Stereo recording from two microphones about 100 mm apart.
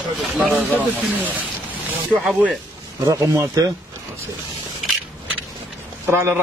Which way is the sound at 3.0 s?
35° right (ahead or behind).